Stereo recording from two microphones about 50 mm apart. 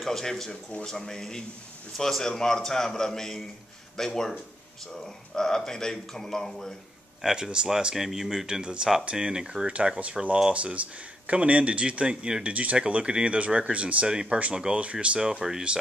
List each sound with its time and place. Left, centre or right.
0.0 s a man's voice: centre
7.2 s speech: centre
9.7 s speech: right
15.1 s speech: centre